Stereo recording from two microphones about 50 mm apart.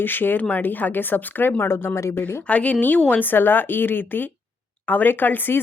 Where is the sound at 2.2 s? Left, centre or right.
Left.